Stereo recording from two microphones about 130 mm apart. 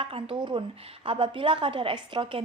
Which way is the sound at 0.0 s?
45° right (ahead or behind).